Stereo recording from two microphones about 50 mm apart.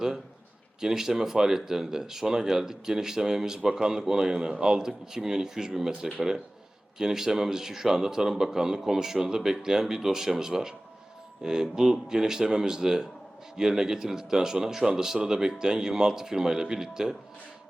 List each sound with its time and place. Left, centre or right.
0.8 s speech: centre